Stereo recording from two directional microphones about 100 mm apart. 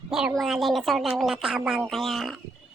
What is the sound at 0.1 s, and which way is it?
Speech, 5° right (ahead or behind).